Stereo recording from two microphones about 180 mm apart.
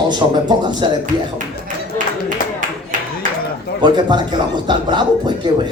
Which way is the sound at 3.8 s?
25° right (ahead or behind).